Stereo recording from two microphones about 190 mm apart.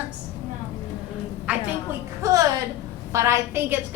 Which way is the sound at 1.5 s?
5° right (ahead or behind).